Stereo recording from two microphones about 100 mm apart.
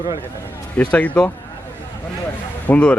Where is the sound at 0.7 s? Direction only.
15° left (ahead or behind).